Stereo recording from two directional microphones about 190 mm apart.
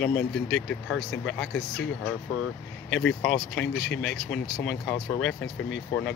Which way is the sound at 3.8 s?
70° left (ahead or behind).